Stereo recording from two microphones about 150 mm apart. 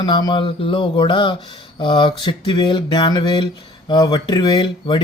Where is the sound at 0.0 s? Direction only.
30° left (ahead or behind).